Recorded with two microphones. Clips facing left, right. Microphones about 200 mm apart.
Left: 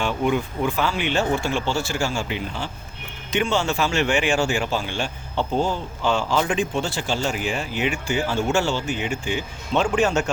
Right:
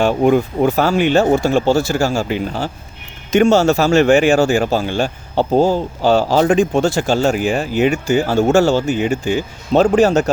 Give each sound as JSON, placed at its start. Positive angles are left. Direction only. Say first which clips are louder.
{"t": 0.0, "sound": "speech", "louder": "right 9 dB", "side_deg": -40}